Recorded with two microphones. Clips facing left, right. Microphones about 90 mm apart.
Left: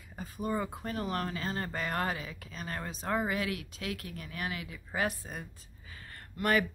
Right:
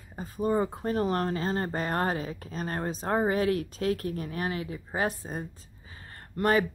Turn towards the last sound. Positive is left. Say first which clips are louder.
# right 4 dB
turn(degrees=-30)  # may be behind; listen again after turning